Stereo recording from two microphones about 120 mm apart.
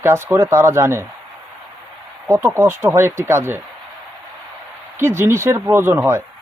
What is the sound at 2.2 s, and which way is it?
Speech, 20° right (ahead or behind).